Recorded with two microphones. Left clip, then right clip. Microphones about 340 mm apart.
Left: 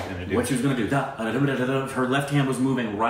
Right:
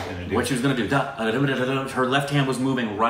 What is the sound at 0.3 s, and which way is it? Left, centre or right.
Speech, centre.